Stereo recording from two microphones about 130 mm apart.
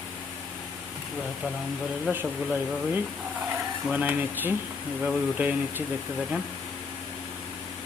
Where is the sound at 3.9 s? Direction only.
15° right (ahead or behind).